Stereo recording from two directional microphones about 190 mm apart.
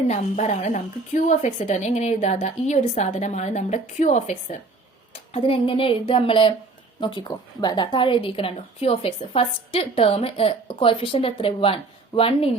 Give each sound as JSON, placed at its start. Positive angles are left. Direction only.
{"t": 0.1, "sound": "a woman's voice", "side_deg": 35}